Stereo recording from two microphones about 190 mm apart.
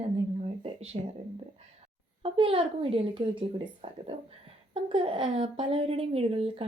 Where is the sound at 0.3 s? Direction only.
35° right (ahead or behind).